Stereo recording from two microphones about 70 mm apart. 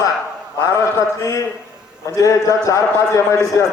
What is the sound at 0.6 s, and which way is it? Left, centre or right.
A man's voice, left.